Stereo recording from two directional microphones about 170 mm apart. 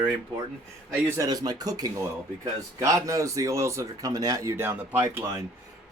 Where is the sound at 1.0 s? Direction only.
20° right (ahead or behind).